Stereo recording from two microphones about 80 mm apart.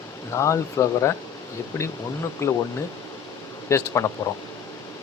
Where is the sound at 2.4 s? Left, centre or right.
Left.